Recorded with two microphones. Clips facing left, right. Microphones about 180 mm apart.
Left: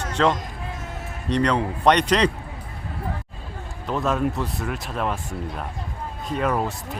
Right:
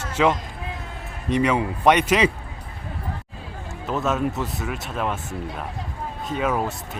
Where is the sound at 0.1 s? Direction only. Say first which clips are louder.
Right 1 dB; 5° right (ahead or behind).